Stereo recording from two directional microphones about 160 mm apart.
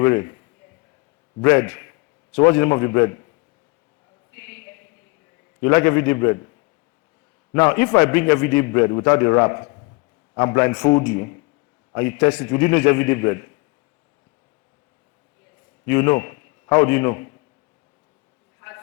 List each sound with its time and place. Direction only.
0.0 s a man's voice: 15° left (ahead or behind)
1.4 s a man's voice: 15° left (ahead or behind)
4.4 s a sound: 10° left (ahead or behind)
5.5 s a man's voice: 15° left (ahead or behind)
7.5 s a man's voice: 15° left (ahead or behind)
15.9 s a man's voice: 15° left (ahead or behind)